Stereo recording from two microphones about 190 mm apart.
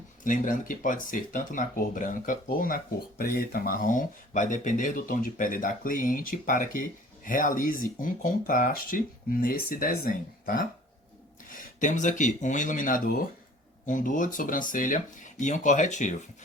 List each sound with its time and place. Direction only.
0.3 s speech: 45° left (ahead or behind)